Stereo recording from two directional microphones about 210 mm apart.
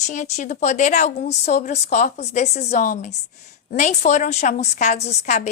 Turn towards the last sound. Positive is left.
turn(degrees=35)  # may be behind; listen again after turning